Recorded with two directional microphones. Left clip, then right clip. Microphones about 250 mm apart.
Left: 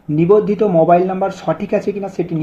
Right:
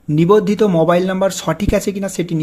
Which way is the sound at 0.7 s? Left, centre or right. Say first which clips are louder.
Left 4 dB; right.